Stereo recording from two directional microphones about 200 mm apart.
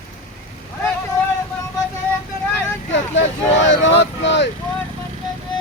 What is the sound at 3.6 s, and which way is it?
Vehicle, 65° left (ahead or behind).